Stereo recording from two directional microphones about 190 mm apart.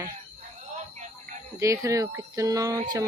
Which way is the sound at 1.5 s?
15° right (ahead or behind).